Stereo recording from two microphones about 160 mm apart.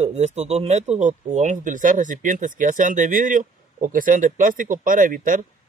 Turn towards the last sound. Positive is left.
turn(degrees=-55)  # may be behind; listen again after turning